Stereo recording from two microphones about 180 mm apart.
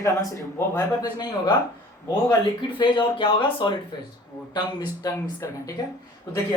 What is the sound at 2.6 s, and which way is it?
A woman's voice, 25° left (ahead or behind).